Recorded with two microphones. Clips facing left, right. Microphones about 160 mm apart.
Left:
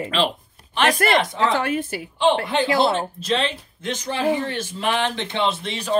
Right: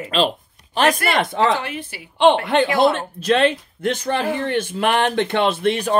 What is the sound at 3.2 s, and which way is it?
Speech, 60° right (ahead or behind).